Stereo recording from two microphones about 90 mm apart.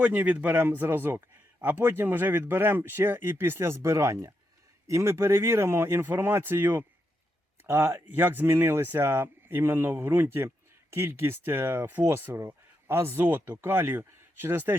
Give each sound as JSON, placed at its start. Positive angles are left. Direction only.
{"t": 0.0, "sound": "a man's voice", "side_deg": -15}